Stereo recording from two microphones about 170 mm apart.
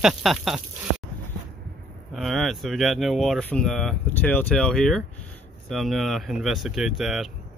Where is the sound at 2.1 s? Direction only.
Centre (ahead or behind).